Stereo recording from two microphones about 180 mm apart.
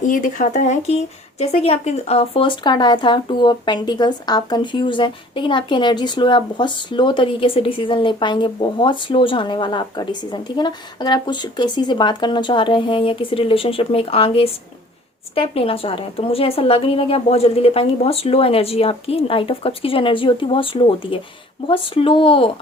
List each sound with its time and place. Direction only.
0.0 s a woman's voice: 45° left (ahead or behind); by 22.4 s 30° left (ahead or behind)